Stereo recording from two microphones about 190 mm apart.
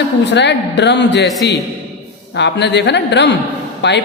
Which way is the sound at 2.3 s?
65° left (ahead or behind).